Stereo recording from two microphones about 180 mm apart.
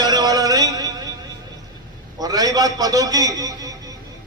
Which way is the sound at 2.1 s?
20° right (ahead or behind).